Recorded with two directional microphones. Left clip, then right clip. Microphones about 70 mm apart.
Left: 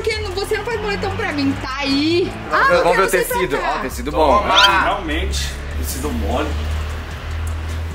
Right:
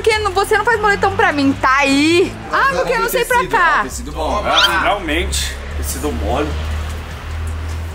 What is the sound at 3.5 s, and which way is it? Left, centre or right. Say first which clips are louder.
Speech: right 7 dB; right.